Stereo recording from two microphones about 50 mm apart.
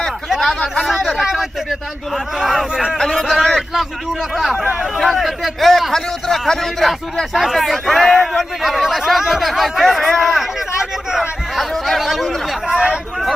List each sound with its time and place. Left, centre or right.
1.0 s speech: centre
4.5 s speech: centre
4.9 s speech: centre
11.5 s speech: centre
12.6 s speech: centre